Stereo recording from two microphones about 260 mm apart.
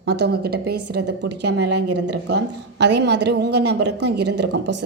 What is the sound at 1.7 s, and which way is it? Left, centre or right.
Speech, right.